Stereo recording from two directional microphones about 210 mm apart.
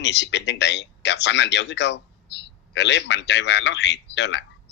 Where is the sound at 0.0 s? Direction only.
55° left (ahead or behind).